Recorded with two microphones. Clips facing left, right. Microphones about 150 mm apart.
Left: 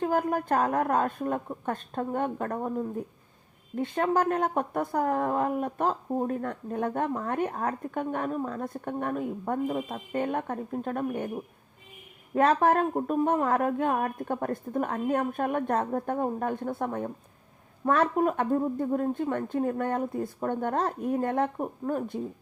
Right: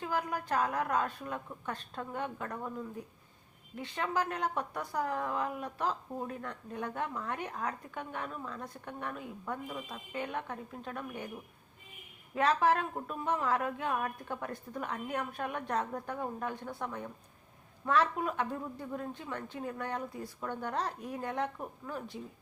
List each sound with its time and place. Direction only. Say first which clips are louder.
0.0 s speech: left 8 dB; 50° left (ahead or behind)